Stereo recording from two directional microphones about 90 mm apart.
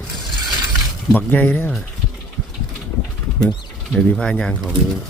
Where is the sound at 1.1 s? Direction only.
20° left (ahead or behind).